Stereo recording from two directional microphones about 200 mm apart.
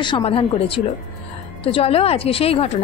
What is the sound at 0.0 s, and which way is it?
A woman's voice, 25° left (ahead or behind).